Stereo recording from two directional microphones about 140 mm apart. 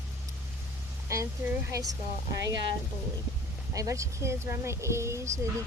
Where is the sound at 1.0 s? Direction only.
20° right (ahead or behind).